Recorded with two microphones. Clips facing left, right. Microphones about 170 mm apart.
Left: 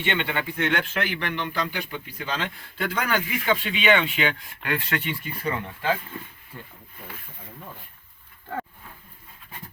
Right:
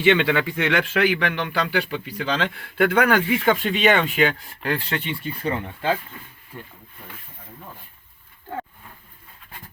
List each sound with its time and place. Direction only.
0.0 s speech: 90° right; by 5.9 s 30° right (ahead or behind)